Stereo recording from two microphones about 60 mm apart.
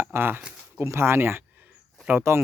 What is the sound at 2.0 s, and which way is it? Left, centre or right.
Speech, right.